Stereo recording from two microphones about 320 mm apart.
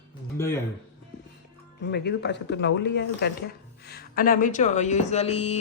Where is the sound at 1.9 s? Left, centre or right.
Left.